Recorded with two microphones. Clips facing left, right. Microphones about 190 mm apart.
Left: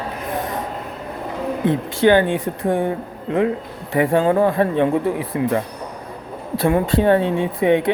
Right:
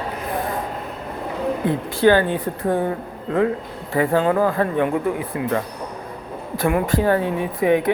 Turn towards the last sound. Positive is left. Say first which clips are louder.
# left 2 dB
turn(degrees=25)  # may be behind; listen again after turning